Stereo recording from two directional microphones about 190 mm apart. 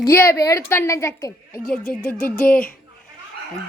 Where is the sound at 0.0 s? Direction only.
15° left (ahead or behind).